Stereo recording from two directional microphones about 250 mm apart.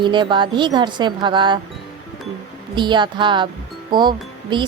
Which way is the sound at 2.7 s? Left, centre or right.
Centre.